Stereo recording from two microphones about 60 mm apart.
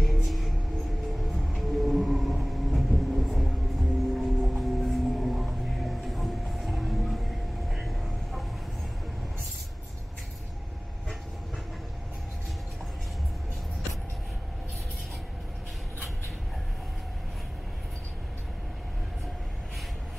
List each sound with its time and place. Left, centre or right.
0.0 s music: centre
1.5 s train: centre
4.1 s music: centre
7.7 s vehicle: centre